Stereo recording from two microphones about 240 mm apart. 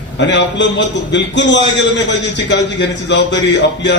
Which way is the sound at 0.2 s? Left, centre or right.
Left.